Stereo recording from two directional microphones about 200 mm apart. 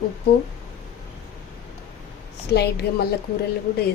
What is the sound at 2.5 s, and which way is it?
Speech, 55° left (ahead or behind).